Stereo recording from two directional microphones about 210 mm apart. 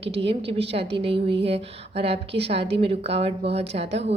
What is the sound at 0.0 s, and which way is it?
A woman's voice, 25° right (ahead or behind).